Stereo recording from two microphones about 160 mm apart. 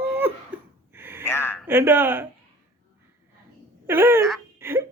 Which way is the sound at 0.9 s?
15° right (ahead or behind).